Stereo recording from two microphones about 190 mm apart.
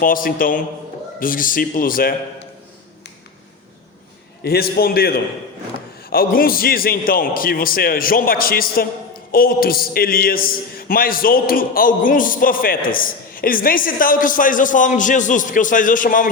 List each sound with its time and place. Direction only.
0.0 s a man's voice: 50° left (ahead or behind)
4.4 s a man's voice: 55° left (ahead or behind)